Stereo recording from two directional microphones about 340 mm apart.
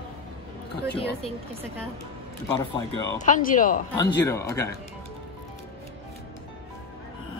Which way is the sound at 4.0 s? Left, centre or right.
Centre.